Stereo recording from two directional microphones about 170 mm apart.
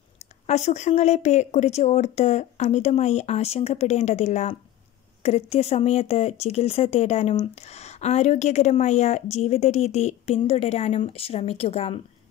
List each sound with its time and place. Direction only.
0.5 s a woman's voice: 40° left (ahead or behind)